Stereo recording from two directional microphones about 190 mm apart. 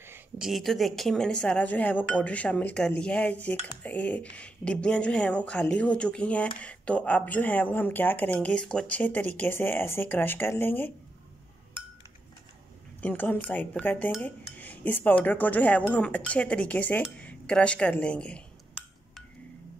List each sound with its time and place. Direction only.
0.0 s a sound: 10° right (ahead or behind)
0.5 s speech: centre (ahead or behind)
13.0 s speech: 10° left (ahead or behind)